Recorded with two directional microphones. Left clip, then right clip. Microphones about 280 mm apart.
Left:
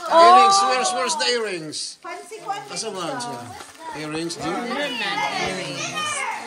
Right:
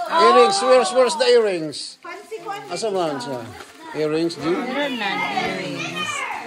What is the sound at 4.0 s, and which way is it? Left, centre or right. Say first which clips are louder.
Speech: right 9 dB; centre.